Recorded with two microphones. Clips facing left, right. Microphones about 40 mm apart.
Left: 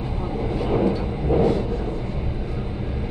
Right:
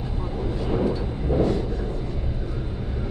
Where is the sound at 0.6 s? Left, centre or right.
Left.